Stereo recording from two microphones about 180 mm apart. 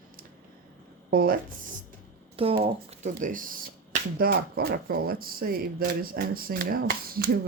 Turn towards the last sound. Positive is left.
turn(degrees=-55)  # may be behind; listen again after turning